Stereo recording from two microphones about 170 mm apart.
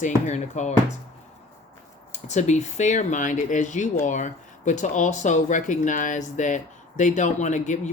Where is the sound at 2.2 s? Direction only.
45° left (ahead or behind).